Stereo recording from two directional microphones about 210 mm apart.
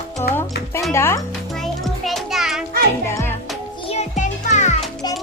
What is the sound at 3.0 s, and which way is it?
Music, 10° left (ahead or behind).